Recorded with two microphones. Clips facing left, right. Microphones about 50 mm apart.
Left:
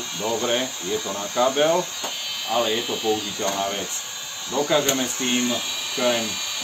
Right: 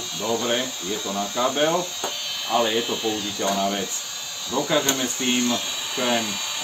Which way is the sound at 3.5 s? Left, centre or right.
Left.